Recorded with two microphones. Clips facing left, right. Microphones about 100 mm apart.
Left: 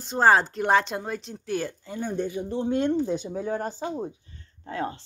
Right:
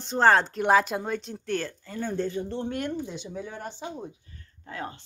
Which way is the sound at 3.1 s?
40° left (ahead or behind).